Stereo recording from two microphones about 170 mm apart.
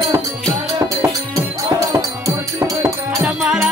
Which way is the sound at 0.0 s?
25° right (ahead or behind).